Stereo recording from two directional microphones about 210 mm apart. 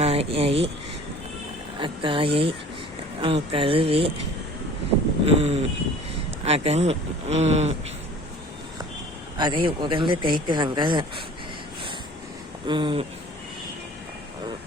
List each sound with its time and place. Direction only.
0.0 s a sound: 30° right (ahead or behind)
1.8 s speech: 25° right (ahead or behind)
5.2 s speech: 30° right (ahead or behind)
9.4 s speech: 20° right (ahead or behind)
12.6 s speech: 25° right (ahead or behind)